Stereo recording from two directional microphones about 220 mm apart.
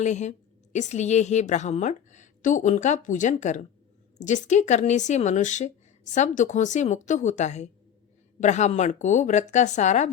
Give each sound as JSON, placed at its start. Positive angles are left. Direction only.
{"t": 0.0, "sound": "a woman's voice", "side_deg": 30}